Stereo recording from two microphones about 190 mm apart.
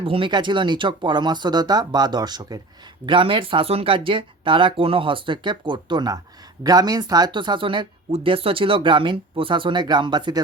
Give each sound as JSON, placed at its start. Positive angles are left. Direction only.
{"t": 0.0, "sound": "speech", "side_deg": -25}